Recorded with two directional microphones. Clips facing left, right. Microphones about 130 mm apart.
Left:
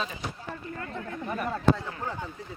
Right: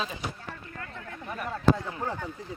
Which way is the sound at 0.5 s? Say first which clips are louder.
Left 5 dB; 25° left (ahead or behind).